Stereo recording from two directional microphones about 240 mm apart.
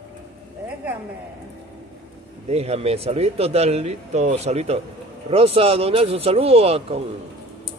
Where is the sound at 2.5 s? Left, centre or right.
Right.